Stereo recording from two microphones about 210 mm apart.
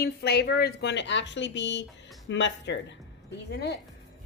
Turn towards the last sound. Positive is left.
turn(degrees=50)  # may be behind; listen again after turning